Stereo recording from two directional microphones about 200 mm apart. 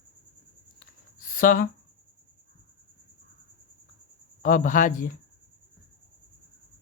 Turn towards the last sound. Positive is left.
turn(degrees=40)  # may be behind; listen again after turning